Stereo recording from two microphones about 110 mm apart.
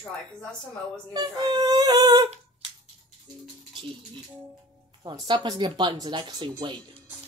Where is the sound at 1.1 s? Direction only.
40° right (ahead or behind).